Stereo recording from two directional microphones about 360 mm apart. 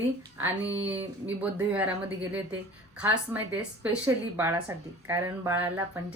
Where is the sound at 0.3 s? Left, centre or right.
Centre.